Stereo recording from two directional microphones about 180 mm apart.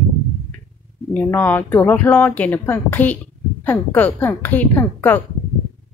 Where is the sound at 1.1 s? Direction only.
10° left (ahead or behind).